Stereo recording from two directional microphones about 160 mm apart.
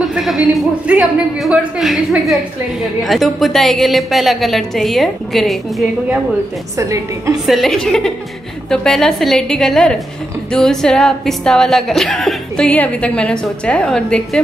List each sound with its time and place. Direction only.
0.0 s speech: centre (ahead or behind)
6.8 s a woman's voice: 20° right (ahead or behind)
7.4 s speech: centre (ahead or behind)